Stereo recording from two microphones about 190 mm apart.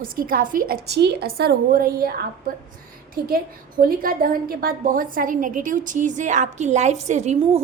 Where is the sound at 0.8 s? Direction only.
60° right (ahead or behind).